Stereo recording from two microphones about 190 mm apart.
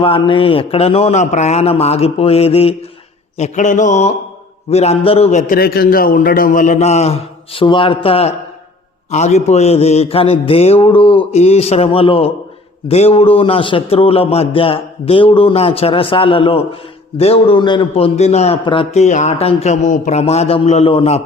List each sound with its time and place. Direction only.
0.0 s a man's voice: 25° left (ahead or behind)
5.5 s a man's voice: 55° left (ahead or behind); by 21.2 s 30° left (ahead or behind)